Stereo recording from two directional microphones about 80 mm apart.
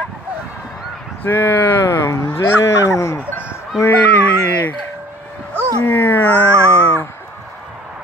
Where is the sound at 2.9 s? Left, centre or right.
Left.